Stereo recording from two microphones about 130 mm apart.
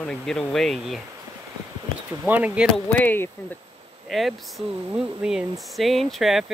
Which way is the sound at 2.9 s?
15° left (ahead or behind).